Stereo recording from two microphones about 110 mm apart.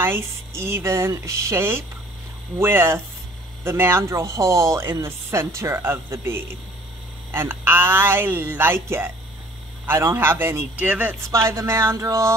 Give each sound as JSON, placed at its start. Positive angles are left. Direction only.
{"t": 0.0, "sound": "speech", "side_deg": -25}
{"t": 11.3, "sound": "speech", "side_deg": -25}